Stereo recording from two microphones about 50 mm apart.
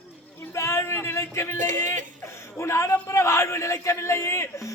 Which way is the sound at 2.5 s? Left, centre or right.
Left.